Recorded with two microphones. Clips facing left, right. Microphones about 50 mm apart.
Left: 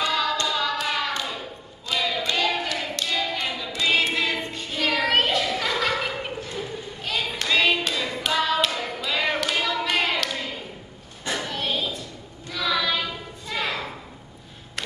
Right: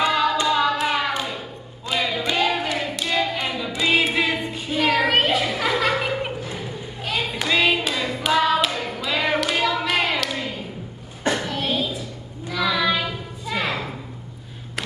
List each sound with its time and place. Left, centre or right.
0.0 s hands: centre
1.9 s a sound: centre
7.2 s hands: centre
11.3 s child singing: centre